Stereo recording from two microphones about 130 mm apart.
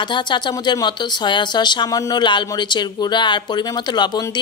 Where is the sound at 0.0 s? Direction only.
35° left (ahead or behind).